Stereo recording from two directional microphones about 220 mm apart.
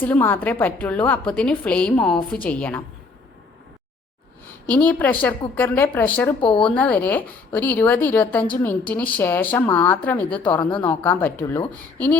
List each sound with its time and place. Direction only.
0.0 s a woman's voice: 10° left (ahead or behind)
4.7 s a woman's voice: 5° left (ahead or behind)
6.4 s speech: 20° left (ahead or behind)
6.7 s a woman's voice: 5° left (ahead or behind)